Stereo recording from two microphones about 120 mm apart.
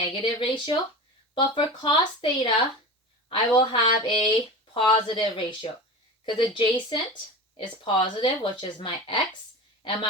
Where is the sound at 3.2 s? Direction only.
45° left (ahead or behind).